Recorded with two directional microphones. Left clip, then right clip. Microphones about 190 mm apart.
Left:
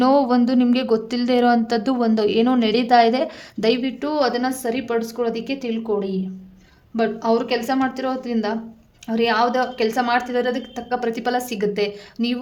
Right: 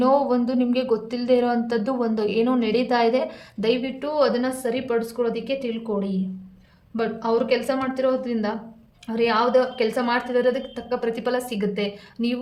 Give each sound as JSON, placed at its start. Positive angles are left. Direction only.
{"t": 0.0, "sound": "speech", "side_deg": 45}